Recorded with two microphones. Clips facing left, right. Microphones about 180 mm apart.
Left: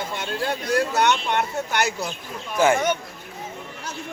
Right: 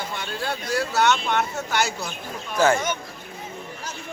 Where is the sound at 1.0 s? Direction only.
15° left (ahead or behind).